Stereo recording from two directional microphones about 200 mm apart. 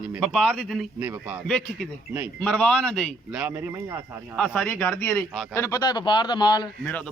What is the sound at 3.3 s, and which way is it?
Speech, 10° right (ahead or behind).